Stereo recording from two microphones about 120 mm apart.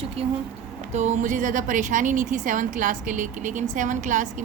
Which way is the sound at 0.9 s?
80° right.